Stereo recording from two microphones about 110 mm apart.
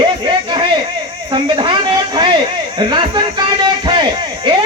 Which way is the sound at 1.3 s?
45° right (ahead or behind).